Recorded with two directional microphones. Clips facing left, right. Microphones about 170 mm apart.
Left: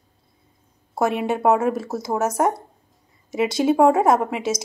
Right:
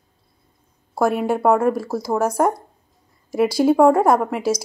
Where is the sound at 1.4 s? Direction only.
5° left (ahead or behind).